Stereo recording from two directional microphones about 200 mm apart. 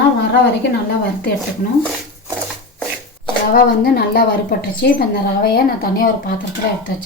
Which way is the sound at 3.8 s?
50° left (ahead or behind).